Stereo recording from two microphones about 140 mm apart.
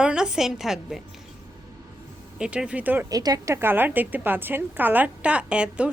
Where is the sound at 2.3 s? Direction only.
5° right (ahead or behind).